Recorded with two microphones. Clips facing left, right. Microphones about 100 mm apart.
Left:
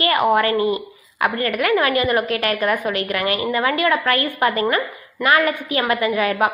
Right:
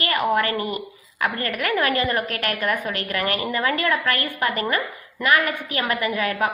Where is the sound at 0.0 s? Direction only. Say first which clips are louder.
Left 5 dB; 20° left (ahead or behind).